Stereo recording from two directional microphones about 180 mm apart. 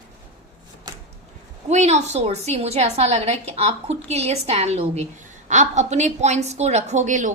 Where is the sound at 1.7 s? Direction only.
40° right (ahead or behind).